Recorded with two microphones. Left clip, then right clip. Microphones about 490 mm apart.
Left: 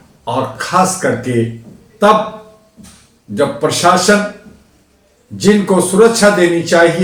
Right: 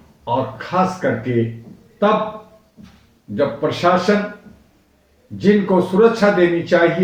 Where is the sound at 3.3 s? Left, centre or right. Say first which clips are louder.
Left 5 dB; right.